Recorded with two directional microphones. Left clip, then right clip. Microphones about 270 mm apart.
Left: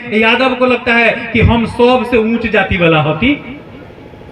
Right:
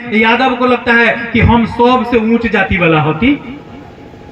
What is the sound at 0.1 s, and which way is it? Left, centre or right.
A man's voice, right.